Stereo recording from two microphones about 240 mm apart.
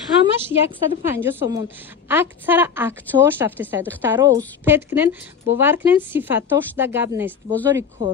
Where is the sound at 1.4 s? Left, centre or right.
Centre.